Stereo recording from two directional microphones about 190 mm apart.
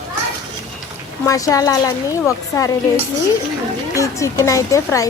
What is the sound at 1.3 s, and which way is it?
Speech, 15° left (ahead or behind).